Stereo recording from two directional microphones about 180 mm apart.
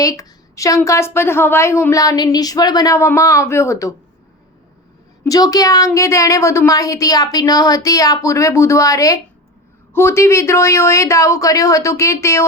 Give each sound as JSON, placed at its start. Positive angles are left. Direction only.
{"t": 0.0, "sound": "a woman's voice", "side_deg": 20}
{"t": 5.2, "sound": "a woman's voice", "side_deg": 20}